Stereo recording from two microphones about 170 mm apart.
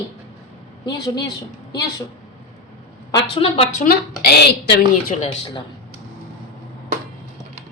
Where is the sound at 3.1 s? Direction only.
35° left (ahead or behind).